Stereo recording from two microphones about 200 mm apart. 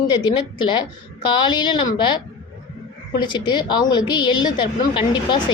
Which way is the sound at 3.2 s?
20° left (ahead or behind).